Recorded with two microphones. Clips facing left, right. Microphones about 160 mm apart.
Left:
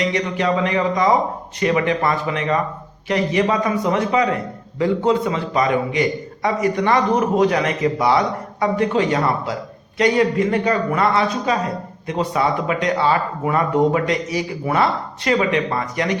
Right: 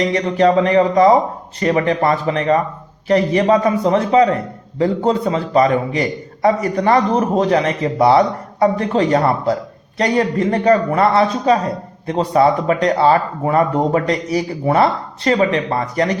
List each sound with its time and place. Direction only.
0.3 s a man's voice: 35° right (ahead or behind)